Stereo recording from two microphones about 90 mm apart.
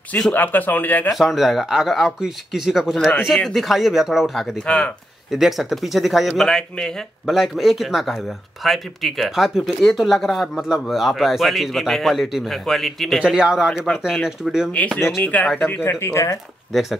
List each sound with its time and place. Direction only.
0.3 s speech: 20° left (ahead or behind)
1.1 s speech: 5° right (ahead or behind)
4.6 s speech: 15° left (ahead or behind)
5.3 s speech: 5° right (ahead or behind)
13.2 s a man's voice: 10° right (ahead or behind)
15.2 s speech: 15° left (ahead or behind)
15.7 s speech: 30° left (ahead or behind)